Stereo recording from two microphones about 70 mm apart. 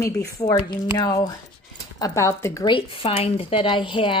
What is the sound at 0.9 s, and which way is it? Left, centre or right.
Speech, left.